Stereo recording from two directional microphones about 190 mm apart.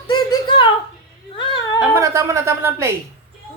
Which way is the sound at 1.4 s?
25° left (ahead or behind).